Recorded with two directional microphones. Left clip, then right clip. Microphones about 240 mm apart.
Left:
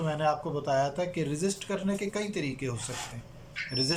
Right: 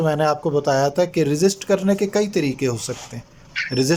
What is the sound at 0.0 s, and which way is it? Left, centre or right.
Speech, right.